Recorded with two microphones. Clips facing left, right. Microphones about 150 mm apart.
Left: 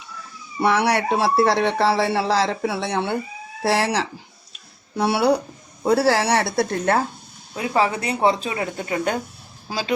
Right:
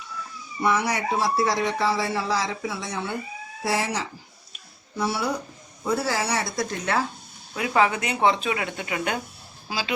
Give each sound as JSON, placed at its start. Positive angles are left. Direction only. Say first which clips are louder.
{"t": 0.6, "sound": "a woman's voice", "louder": "left 5 dB", "side_deg": 70}
{"t": 7.5, "sound": "speech", "louder": "left 1 dB", "side_deg": 30}